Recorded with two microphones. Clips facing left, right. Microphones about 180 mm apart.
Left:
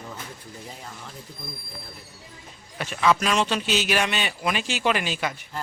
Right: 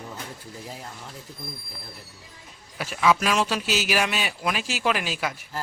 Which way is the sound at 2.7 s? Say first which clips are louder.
Even; 5° right (ahead or behind).